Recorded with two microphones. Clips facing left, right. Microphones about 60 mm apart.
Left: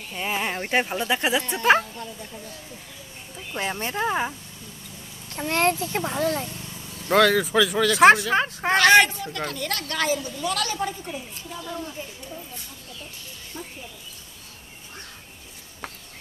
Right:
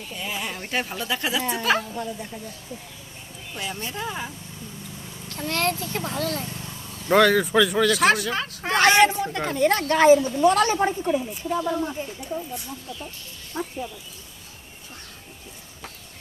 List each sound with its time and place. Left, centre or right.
0.1 s speech: left
3.5 s speech: left
5.3 s speech: left
7.1 s speech: centre
7.9 s speech: left
9.0 s a woman's voice: right
13.5 s speech: right